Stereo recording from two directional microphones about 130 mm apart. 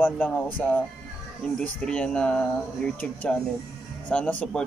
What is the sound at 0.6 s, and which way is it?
Speech, 15° left (ahead or behind).